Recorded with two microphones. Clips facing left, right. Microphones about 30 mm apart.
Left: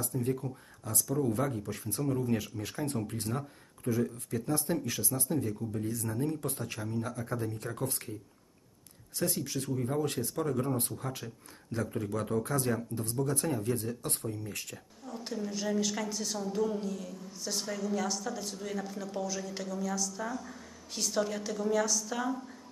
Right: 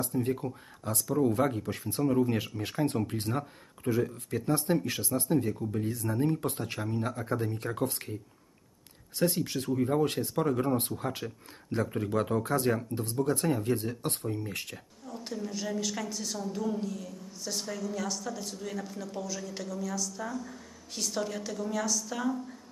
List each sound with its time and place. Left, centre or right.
0.0 s speech: right
9.1 s speech: right
9.6 s speech: right
10.8 s speech: right
15.0 s a woman's voice: centre